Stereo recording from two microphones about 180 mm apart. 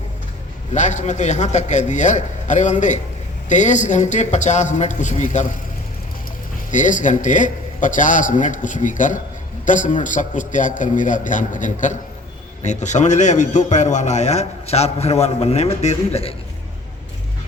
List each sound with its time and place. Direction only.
0.7 s a man's voice: 40° left (ahead or behind)
6.7 s a man's voice: 45° left (ahead or behind)